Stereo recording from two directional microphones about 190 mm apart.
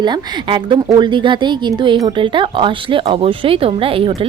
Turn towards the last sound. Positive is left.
turn(degrees=-30)  # may be behind; listen again after turning